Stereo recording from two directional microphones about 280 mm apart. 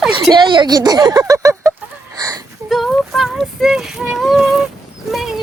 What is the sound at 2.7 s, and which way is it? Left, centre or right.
Child singing, centre.